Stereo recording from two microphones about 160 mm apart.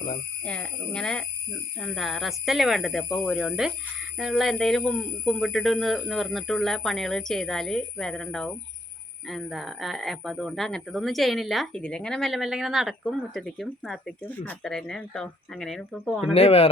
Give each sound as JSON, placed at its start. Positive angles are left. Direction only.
{"t": 0.4, "sound": "speech", "side_deg": 5}
{"t": 16.3, "sound": "speech", "side_deg": 40}